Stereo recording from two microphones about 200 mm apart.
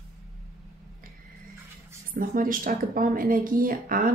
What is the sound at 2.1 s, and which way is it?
Speech, 45° right (ahead or behind).